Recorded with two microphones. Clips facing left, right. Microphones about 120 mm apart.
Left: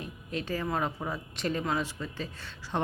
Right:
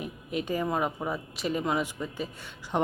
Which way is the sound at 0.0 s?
15° right (ahead or behind).